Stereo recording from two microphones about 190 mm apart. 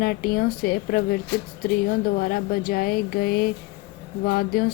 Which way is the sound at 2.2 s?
50° left (ahead or behind).